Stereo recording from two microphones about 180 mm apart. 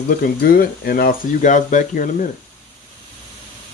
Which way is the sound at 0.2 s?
55° left (ahead or behind).